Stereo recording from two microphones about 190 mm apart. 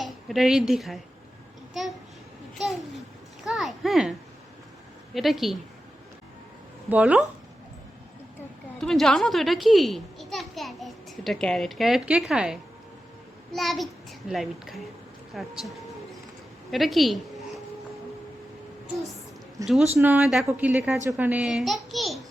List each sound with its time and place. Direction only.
0.0 s speech: centre (ahead or behind)
2.6 s a sound: centre (ahead or behind)
5.1 s a child's voice: centre (ahead or behind)
6.9 s a woman's voice: 5° right (ahead or behind)
8.8 s a child's voice: centre (ahead or behind)
19.6 s a woman's voice: 15° right (ahead or behind); by 22.2 s centre (ahead or behind)